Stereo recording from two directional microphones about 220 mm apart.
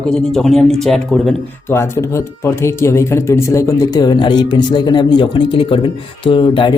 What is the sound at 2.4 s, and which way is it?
Speech, 10° left (ahead or behind).